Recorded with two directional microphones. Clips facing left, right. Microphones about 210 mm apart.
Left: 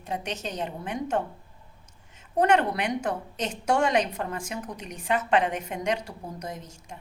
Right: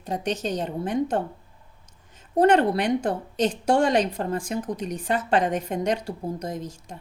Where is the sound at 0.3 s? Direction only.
35° right (ahead or behind).